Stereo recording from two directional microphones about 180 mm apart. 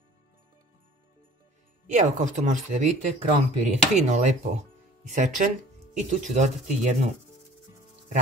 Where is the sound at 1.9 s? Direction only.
40° right (ahead or behind).